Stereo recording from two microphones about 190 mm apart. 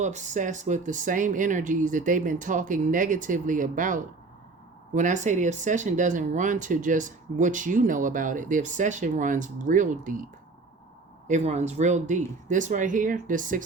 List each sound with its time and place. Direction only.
0.0 s speech: 40° right (ahead or behind)
11.3 s speech: 35° right (ahead or behind)